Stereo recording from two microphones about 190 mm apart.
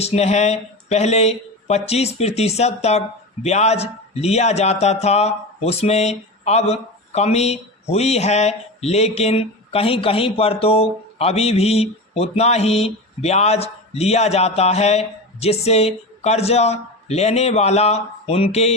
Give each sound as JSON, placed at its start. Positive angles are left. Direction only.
{"t": 0.0, "sound": "speech", "side_deg": 35}